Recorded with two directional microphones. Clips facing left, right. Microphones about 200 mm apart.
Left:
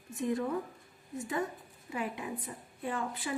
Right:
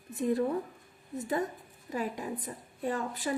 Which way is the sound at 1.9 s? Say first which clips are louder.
Right 3 dB; 40° right (ahead or behind).